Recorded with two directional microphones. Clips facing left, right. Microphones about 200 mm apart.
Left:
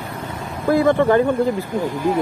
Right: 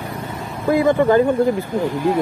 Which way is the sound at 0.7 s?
15° right (ahead or behind).